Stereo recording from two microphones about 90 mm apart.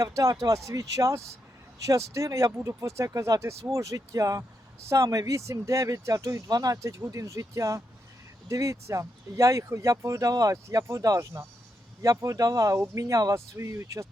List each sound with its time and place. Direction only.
0.0 s speech: 40° right (ahead or behind)